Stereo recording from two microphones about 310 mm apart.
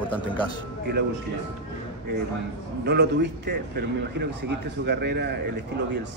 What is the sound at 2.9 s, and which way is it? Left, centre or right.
A man's voice, right.